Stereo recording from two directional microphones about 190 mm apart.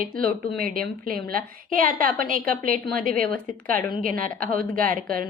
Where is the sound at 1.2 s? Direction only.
50° right (ahead or behind).